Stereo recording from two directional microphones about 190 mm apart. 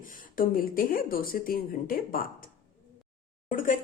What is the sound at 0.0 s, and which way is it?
Speech, 45° left (ahead or behind).